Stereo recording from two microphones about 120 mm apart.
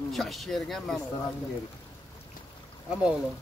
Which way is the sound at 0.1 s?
Centre (ahead or behind).